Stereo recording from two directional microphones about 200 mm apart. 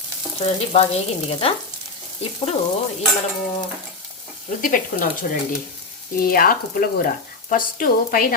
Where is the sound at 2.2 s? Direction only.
30° left (ahead or behind).